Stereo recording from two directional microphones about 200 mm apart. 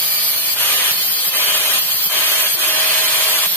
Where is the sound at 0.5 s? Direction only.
10° left (ahead or behind).